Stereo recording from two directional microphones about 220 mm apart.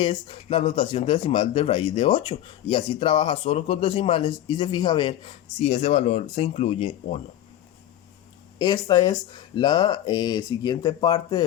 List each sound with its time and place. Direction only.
0.0 s speech: 20° left (ahead or behind)
8.5 s speech: 20° left (ahead or behind)